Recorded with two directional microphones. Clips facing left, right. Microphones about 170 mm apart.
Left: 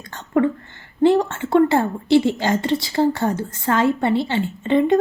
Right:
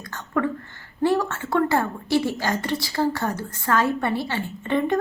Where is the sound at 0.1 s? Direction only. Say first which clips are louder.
Left 6 dB; 25° left (ahead or behind).